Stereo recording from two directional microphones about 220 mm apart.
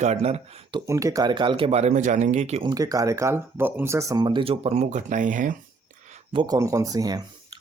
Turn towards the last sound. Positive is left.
turn(degrees=-15)  # may be behind; listen again after turning